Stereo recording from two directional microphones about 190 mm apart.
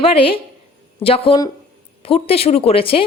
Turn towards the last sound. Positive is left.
turn(degrees=30)  # may be behind; listen again after turning